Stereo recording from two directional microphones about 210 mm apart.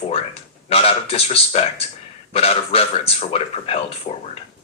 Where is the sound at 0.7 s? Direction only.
30° left (ahead or behind).